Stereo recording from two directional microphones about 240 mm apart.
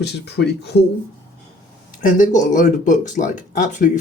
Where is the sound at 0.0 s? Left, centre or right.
Left.